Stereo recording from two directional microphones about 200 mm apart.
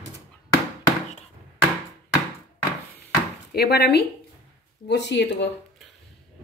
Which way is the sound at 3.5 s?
55° left (ahead or behind).